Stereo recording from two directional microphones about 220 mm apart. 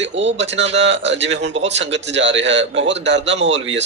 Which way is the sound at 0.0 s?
55° right (ahead or behind).